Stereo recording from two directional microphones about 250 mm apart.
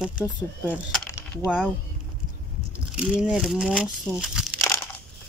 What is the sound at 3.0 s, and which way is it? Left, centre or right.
Speech, centre.